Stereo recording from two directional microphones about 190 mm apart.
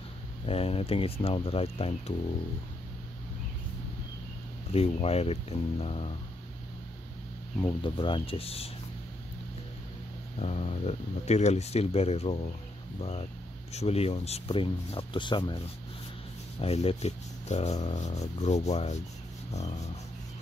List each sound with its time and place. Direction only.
0.5 s speech: 30° left (ahead or behind)
4.7 s speech: 35° left (ahead or behind)
7.6 s speech: 25° left (ahead or behind)
10.4 s speech: 35° left (ahead or behind)